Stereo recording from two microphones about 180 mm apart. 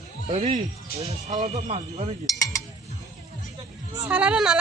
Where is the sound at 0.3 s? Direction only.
35° right (ahead or behind).